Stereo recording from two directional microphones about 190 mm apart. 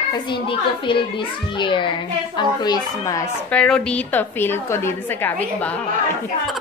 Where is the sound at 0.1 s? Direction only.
25° left (ahead or behind).